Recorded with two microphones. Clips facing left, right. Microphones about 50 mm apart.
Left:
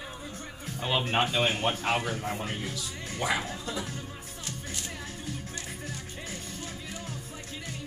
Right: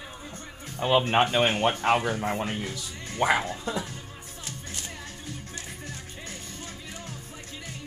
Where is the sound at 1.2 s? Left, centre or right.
Right.